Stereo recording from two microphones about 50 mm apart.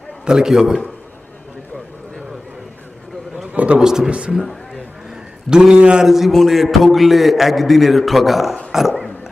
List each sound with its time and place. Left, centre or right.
0.3 s a man's voice: centre
3.5 s a sound: right
3.8 s a man's voice: centre
4.7 s a sound: centre
6.1 s a man's voice: centre
8.7 s dog: centre